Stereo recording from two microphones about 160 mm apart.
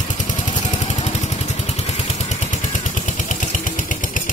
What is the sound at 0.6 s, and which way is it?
Vehicle, 45° left (ahead or behind).